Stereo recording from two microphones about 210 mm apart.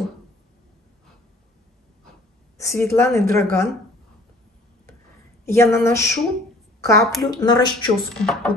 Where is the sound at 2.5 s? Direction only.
15° left (ahead or behind).